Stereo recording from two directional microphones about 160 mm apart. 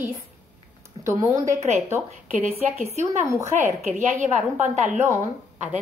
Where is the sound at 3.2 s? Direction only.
15° right (ahead or behind).